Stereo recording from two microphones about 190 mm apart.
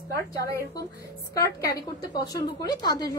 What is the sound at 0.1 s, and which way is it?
A woman's voice, 15° left (ahead or behind).